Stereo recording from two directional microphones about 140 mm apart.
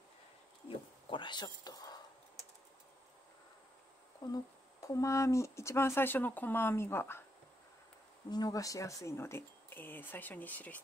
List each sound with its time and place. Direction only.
0.7 s a sound: 35° left (ahead or behind)
4.2 s speech: 25° left (ahead or behind)
8.3 s speech: 25° left (ahead or behind); by 10.8 s 10° left (ahead or behind)